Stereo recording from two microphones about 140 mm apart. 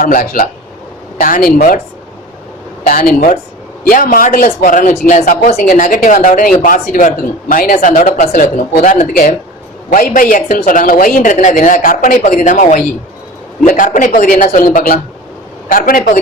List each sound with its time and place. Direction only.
0.0 s speech: 80° left
1.5 s speech: 70° left (ahead or behind)
2.8 s speech: 90° left